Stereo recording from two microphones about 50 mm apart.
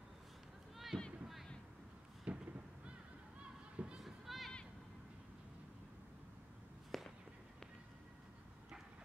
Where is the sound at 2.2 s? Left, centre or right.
Right.